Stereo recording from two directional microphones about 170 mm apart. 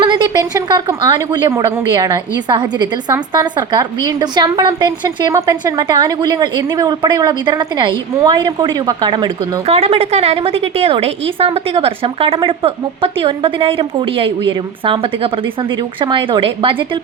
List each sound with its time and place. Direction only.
0.0 s a woman's voice: 25° right (ahead or behind)